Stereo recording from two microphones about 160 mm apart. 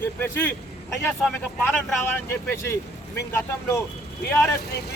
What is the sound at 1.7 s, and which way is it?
Speech, 15° left (ahead or behind).